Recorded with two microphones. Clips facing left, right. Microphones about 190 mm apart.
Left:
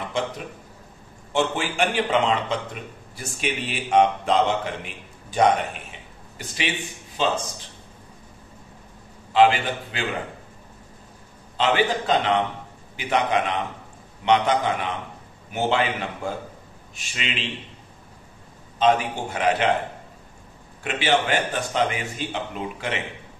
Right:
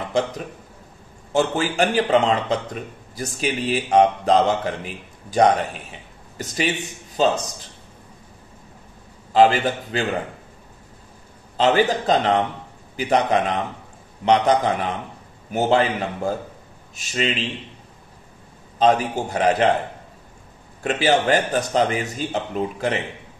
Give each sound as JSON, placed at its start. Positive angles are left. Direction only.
{"t": 1.3, "sound": "a man's voice", "side_deg": -40}
{"t": 9.3, "sound": "a man's voice", "side_deg": -40}
{"t": 11.5, "sound": "a man's voice", "side_deg": -40}
{"t": 18.8, "sound": "a man's voice", "side_deg": -40}
{"t": 20.8, "sound": "a man's voice", "side_deg": -40}